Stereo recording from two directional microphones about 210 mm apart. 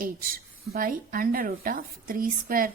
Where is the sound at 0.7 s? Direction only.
45° right (ahead or behind).